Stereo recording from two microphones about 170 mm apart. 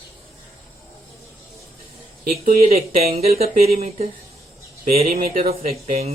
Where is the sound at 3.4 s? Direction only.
60° right (ahead or behind).